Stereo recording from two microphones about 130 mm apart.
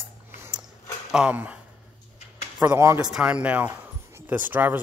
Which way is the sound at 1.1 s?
10° right (ahead or behind).